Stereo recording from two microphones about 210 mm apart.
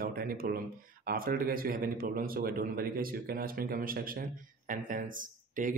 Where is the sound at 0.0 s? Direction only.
45° right (ahead or behind).